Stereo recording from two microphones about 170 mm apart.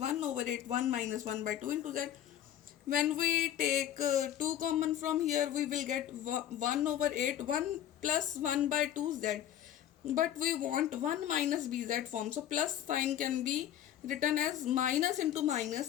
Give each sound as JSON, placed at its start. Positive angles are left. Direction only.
{"t": 0.0, "sound": "speech", "side_deg": -45}